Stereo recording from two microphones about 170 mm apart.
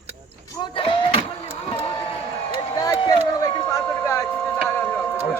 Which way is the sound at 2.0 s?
30° left (ahead or behind).